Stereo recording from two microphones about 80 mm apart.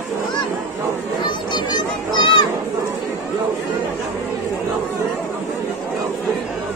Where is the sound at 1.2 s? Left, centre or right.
Left.